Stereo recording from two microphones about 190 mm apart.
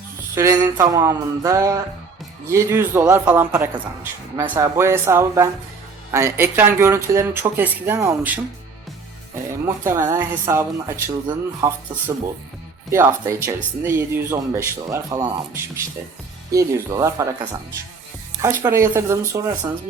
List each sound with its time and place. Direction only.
0.3 s speech: 20° right (ahead or behind)
9.6 s speech: 15° right (ahead or behind)